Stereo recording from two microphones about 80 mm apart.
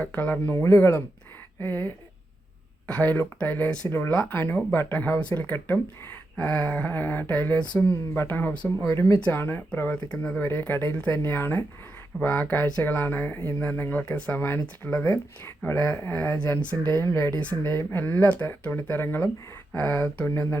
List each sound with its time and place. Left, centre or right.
0.0 s speech: left
4.1 s speech: centre
4.4 s speech: left